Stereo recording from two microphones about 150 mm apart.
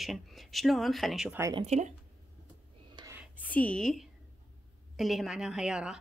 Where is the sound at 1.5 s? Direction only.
45° right (ahead or behind).